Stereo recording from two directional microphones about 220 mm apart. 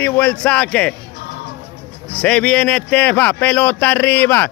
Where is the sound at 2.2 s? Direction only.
5° left (ahead or behind).